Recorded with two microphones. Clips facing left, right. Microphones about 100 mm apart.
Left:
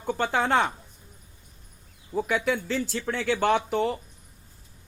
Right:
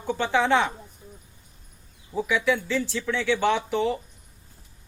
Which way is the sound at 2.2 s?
50° left (ahead or behind).